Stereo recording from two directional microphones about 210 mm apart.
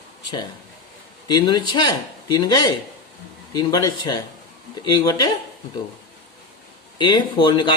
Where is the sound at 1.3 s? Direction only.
20° left (ahead or behind).